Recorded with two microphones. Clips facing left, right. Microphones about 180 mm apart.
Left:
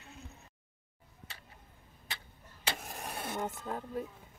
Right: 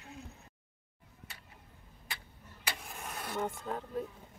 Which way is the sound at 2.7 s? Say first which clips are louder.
Left 2 dB; 40° left (ahead or behind).